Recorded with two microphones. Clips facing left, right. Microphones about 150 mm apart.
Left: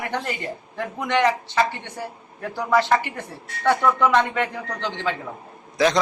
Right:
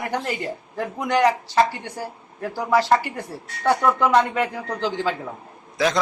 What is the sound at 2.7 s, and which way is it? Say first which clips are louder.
Speech: right 1 dB; 35° right (ahead or behind).